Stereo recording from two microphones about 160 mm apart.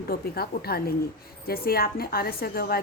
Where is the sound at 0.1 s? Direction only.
75° left (ahead or behind).